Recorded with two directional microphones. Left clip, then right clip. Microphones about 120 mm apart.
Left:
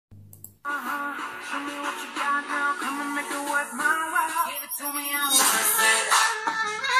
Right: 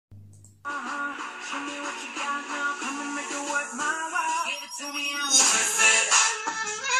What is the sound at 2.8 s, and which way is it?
Music, 15° right (ahead or behind).